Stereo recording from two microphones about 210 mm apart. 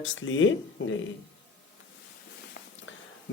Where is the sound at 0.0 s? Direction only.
65° left (ahead or behind).